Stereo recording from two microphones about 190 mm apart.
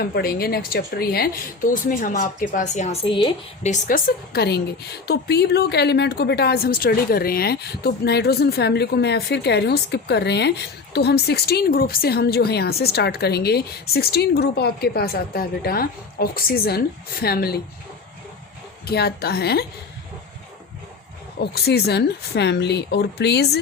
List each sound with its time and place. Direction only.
0.0 s speech: 55° left (ahead or behind); by 3.7 s 25° left (ahead or behind)
3.7 s a woman's voice: 45° left (ahead or behind)
18.9 s a woman's voice: 55° left (ahead or behind)
21.4 s a woman's voice: 55° left (ahead or behind)